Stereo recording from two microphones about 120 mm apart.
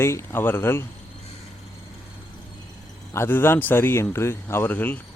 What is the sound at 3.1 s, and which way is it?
Speech, 20° left (ahead or behind).